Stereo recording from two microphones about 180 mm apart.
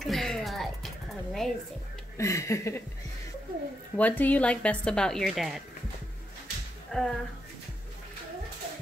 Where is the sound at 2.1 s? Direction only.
15° left (ahead or behind).